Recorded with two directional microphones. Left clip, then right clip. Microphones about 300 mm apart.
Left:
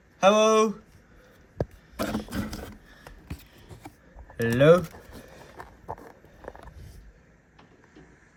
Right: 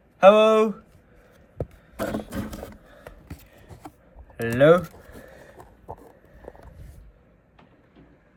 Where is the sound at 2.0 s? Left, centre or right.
Centre.